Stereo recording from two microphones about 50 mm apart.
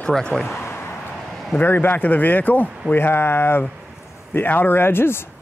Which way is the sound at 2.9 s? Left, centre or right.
Left.